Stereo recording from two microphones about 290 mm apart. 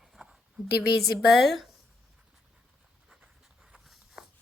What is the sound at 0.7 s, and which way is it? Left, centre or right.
Speech, left.